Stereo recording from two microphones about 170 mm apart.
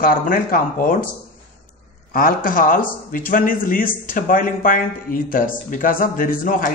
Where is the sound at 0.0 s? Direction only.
55° left (ahead or behind).